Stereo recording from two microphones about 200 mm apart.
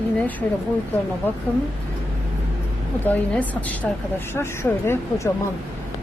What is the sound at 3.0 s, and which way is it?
Speech, 10° left (ahead or behind).